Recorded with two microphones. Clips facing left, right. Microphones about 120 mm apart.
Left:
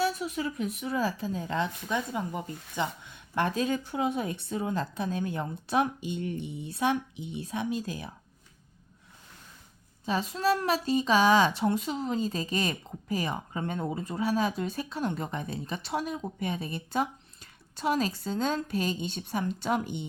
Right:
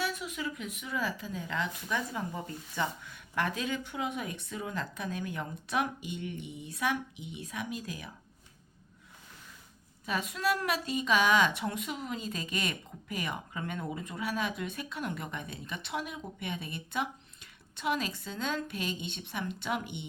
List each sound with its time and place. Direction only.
0.0 s a woman's voice: 35° left (ahead or behind)
10.1 s a woman's voice: 30° left (ahead or behind)